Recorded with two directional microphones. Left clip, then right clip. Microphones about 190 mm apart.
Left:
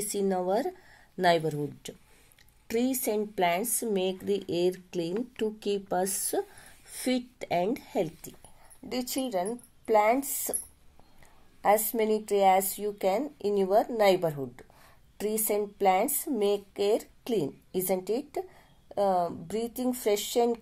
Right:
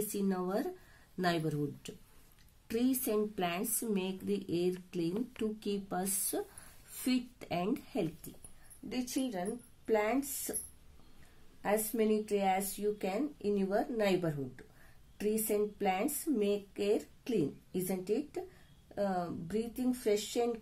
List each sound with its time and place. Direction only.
0.1 s speech: 20° left (ahead or behind)
8.9 s speech: 30° left (ahead or behind)
11.6 s speech: 25° left (ahead or behind)